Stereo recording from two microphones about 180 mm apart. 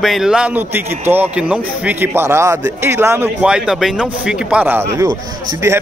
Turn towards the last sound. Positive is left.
turn(degrees=-15)  # may be behind; listen again after turning